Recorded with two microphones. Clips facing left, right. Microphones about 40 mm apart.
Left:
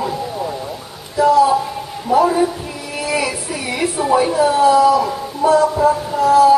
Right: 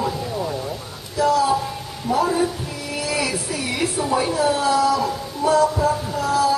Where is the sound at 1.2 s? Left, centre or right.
Left.